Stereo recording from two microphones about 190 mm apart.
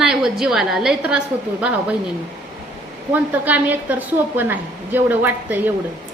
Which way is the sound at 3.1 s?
10° right (ahead or behind).